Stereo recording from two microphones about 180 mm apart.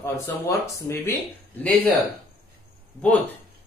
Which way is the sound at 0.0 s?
15° left (ahead or behind).